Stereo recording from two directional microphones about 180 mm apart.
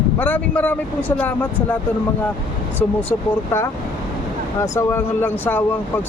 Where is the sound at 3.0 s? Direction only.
10° left (ahead or behind).